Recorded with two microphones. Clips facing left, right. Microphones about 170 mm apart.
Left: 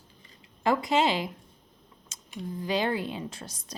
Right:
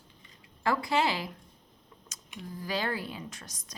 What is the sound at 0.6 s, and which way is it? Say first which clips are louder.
Speech: left 3 dB; 20° left (ahead or behind).